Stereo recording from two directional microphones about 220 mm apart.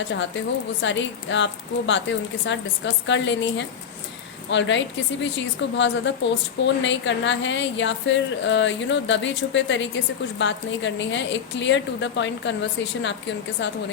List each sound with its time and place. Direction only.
0.1 s speech: 55° left (ahead or behind)